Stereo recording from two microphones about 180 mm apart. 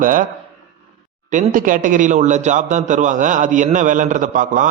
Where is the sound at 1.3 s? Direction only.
45° right (ahead or behind).